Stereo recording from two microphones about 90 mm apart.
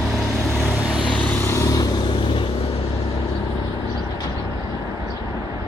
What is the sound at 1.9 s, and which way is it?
Vehicle, 70° left (ahead or behind).